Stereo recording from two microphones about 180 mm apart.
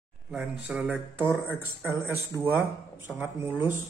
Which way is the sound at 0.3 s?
5° right (ahead or behind).